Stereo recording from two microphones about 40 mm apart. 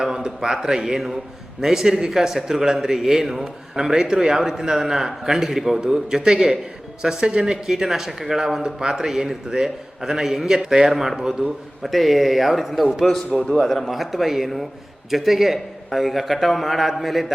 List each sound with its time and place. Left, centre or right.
0.0 s a sound: centre
0.4 s a man's voice: centre
10.9 s a man's voice: centre
11.2 s a man's voice: centre